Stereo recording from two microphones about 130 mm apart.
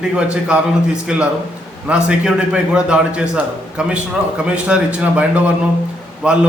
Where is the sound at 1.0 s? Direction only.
5° right (ahead or behind).